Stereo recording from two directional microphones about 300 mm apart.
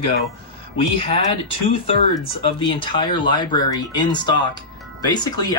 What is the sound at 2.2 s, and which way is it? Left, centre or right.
Speech, centre.